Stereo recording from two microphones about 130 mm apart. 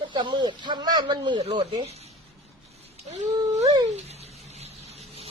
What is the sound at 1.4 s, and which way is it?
Speech, 50° right (ahead or behind).